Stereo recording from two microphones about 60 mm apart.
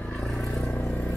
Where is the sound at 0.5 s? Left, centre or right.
Left.